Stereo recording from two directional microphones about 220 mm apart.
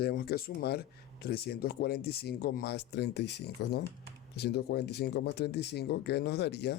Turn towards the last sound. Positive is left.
turn(degrees=50)  # may be behind; listen again after turning